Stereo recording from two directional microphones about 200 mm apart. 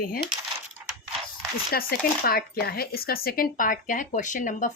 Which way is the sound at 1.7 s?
50° left (ahead or behind).